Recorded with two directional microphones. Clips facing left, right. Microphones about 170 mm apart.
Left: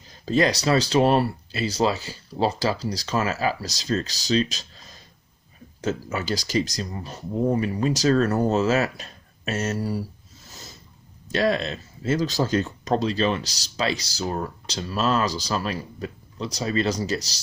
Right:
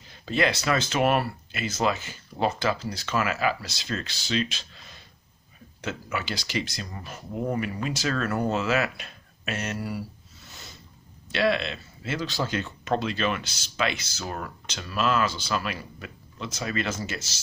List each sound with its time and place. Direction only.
0.1 s speech: 40° left (ahead or behind)
6.9 s speech: 30° left (ahead or behind)
11.3 s speech: 40° left (ahead or behind)